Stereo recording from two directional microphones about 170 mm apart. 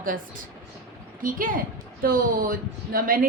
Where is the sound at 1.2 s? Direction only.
55° right (ahead or behind).